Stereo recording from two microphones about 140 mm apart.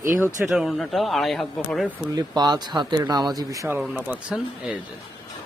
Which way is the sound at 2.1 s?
30° right (ahead or behind).